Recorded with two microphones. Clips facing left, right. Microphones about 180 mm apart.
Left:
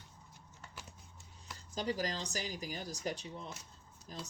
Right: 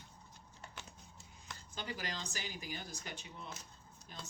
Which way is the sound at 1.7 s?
35° left (ahead or behind).